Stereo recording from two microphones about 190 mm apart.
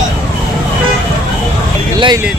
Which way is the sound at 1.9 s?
25° right (ahead or behind).